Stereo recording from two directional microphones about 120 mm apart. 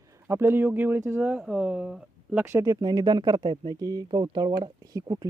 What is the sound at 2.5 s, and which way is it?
Speech, 25° right (ahead or behind).